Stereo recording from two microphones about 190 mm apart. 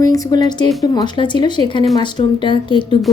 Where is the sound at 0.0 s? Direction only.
20° left (ahead or behind).